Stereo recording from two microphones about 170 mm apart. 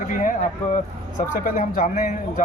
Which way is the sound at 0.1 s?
50° left (ahead or behind).